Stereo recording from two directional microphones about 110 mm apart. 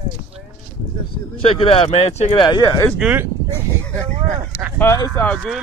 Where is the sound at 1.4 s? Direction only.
60° left (ahead or behind).